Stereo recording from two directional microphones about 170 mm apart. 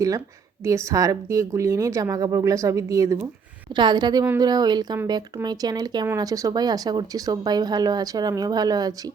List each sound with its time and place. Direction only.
0.6 s speech: 20° right (ahead or behind)